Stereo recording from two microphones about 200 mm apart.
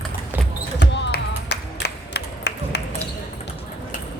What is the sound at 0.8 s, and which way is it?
Basketball bounce, 60° left (ahead or behind).